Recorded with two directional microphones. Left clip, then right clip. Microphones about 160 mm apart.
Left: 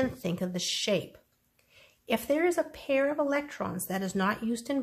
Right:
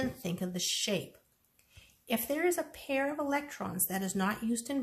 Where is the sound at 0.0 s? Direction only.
50° left (ahead or behind).